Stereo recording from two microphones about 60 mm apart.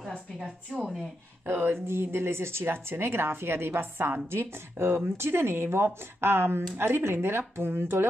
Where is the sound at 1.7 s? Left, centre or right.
Right.